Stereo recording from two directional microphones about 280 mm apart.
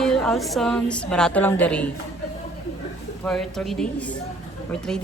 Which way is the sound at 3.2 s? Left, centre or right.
Centre.